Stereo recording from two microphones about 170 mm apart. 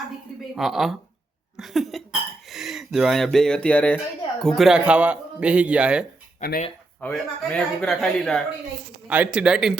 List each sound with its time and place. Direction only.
0.5 s speech: centre (ahead or behind)
6.4 s speech: 50° left (ahead or behind)
7.0 s speech: 5° left (ahead or behind)
9.0 s speech: 10° right (ahead or behind)